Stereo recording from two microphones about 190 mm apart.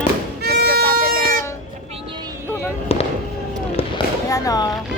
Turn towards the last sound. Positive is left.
turn(degrees=20)  # may be behind; listen again after turning